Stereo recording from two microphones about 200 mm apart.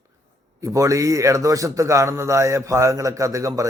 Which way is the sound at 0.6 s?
15° right (ahead or behind).